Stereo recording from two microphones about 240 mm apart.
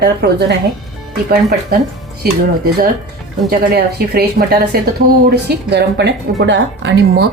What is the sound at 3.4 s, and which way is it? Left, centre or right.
A woman's voice, right.